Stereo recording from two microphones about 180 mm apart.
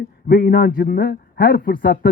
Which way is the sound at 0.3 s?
55° left (ahead or behind).